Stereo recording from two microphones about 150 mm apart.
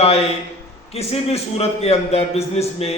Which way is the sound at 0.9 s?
45° left (ahead or behind).